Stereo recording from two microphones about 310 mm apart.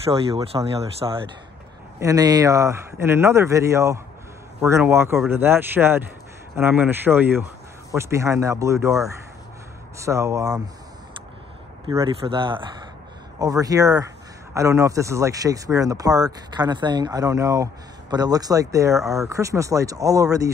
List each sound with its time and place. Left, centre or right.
0.0 s speech: centre
11.9 s speech: centre